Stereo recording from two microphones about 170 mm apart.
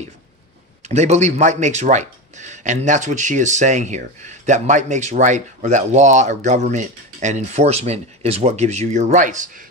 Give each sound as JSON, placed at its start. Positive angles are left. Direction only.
{"t": 0.8, "sound": "speech", "side_deg": -40}